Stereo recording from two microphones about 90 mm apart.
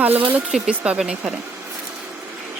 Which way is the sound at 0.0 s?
15° right (ahead or behind).